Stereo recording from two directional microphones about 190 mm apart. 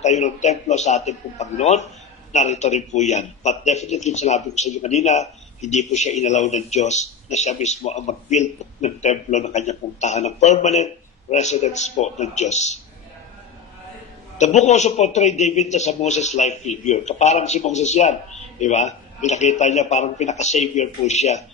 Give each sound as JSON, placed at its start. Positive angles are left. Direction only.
{"t": 0.0, "sound": "a man's voice", "side_deg": 35}
{"t": 14.4, "sound": "a man's voice", "side_deg": 35}